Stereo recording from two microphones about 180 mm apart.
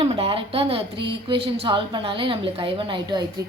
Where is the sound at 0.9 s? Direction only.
70° right (ahead or behind).